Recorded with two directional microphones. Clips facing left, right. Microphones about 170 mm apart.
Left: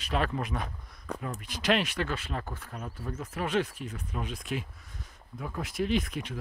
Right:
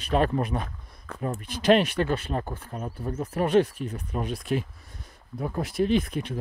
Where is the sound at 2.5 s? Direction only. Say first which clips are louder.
Right 5 dB; 30° right (ahead or behind).